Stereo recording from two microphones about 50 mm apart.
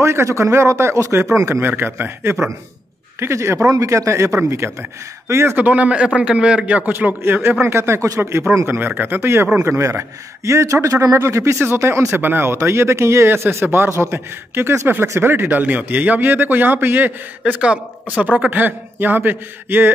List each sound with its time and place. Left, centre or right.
0.0 s a man's voice: right
1.6 s a man's voice: right
3.2 s a man's voice: right
5.3 s a man's voice: right
5.6 s a man's voice: right
7.0 s speech: right
7.6 s a man's voice: right
9.6 s a man's voice: right
11.1 s a man's voice: right
11.6 s a man's voice: right
12.2 s a man's voice: right
12.5 s a man's voice: right
17.4 s speech: right